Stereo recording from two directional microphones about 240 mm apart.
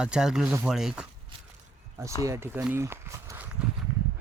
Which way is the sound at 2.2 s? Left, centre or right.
Centre.